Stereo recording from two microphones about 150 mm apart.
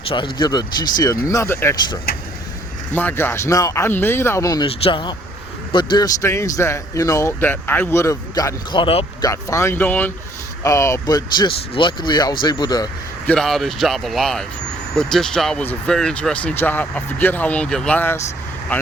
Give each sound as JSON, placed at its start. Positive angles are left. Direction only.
{"t": 0.1, "sound": "speech", "side_deg": 30}
{"t": 2.9, "sound": "speech", "side_deg": 10}
{"t": 4.6, "sound": "speech", "side_deg": 40}
{"t": 6.2, "sound": "speech", "side_deg": 20}
{"t": 8.7, "sound": "speech", "side_deg": 35}
{"t": 9.2, "sound": "speech", "side_deg": 20}
{"t": 13.2, "sound": "speech", "side_deg": 5}